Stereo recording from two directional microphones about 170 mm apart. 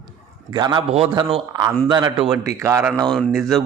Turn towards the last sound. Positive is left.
turn(degrees=0)  # may be behind; listen again after turning